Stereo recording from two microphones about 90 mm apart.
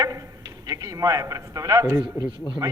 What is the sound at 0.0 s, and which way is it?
A man's voice, 40° right (ahead or behind).